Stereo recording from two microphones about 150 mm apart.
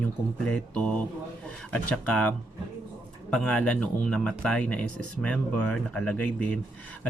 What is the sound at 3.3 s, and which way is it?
A man's voice, 5° left (ahead or behind).